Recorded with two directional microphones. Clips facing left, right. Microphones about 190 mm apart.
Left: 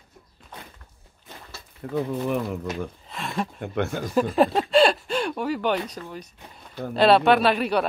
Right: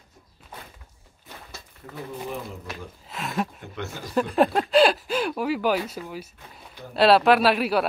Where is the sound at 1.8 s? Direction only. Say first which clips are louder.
Left 9 dB; 60° left (ahead or behind).